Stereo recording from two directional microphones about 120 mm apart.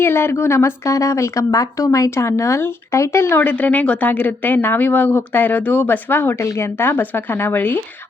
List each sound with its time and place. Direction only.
0.0 s a woman's voice: 20° left (ahead or behind)